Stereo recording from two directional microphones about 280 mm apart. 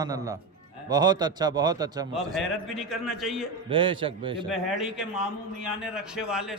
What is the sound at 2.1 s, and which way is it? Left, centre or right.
A man's voice, centre.